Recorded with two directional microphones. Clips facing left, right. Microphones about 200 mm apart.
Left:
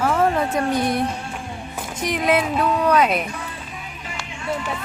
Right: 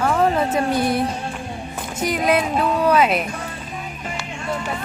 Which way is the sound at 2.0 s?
Centre (ahead or behind).